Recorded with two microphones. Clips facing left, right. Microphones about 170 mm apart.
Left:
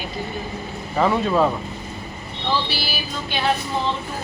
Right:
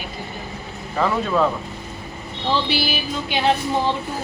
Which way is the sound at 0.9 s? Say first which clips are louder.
Left 2 dB; 10° left (ahead or behind).